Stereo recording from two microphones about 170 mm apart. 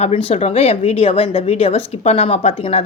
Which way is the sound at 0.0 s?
35° left (ahead or behind).